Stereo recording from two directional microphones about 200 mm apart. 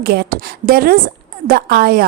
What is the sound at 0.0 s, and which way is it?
A woman's voice, 50° right (ahead or behind).